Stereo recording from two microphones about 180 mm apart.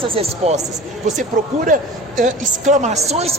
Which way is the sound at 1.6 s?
45° right (ahead or behind).